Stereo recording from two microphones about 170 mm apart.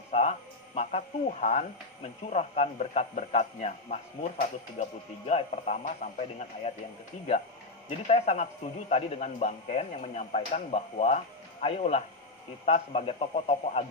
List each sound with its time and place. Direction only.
0.1 s music: 40° left (ahead or behind)
0.8 s speech: 40° left (ahead or behind)
7.9 s speech: 40° left (ahead or behind)